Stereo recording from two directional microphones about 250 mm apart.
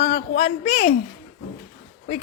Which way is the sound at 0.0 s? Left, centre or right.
Left.